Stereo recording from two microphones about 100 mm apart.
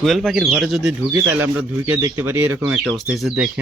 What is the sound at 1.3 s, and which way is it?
Speech, 20° right (ahead or behind).